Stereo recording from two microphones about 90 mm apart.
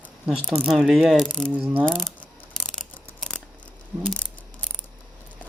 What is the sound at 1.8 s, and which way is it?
Speech, 5° left (ahead or behind).